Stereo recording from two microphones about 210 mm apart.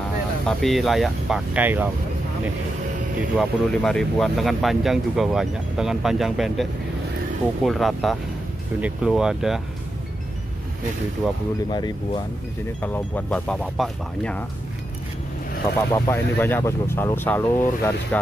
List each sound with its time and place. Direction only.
0.5 s speech: centre (ahead or behind)
3.2 s speech: centre (ahead or behind)
11.7 s speech: 20° left (ahead or behind)
12.8 s speech: 10° left (ahead or behind)
15.9 s speech: 10° left (ahead or behind)